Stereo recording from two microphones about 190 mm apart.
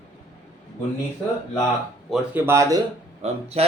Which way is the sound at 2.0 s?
10° right (ahead or behind).